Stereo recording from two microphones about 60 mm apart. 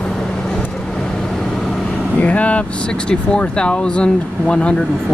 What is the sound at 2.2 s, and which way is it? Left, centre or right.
Speech, left.